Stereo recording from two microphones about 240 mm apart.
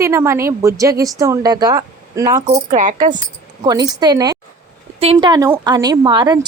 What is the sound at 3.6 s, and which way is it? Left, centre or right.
A woman's voice, centre.